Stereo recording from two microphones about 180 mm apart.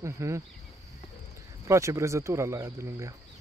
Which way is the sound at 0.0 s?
15° right (ahead or behind).